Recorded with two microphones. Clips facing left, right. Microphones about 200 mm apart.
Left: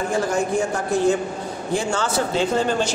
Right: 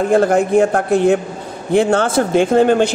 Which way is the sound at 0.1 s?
60° right (ahead or behind).